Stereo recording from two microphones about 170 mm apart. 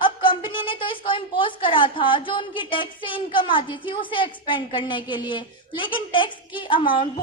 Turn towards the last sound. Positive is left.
turn(degrees=30)  # may be behind; listen again after turning